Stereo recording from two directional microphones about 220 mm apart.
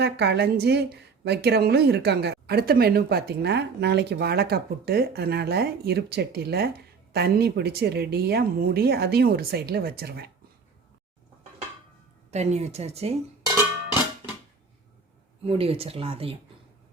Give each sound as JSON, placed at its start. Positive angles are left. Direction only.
{"t": 0.0, "sound": "a woman's voice", "side_deg": -50}
{"t": 12.3, "sound": "a woman's voice", "side_deg": -30}
{"t": 15.4, "sound": "a woman's voice", "side_deg": -25}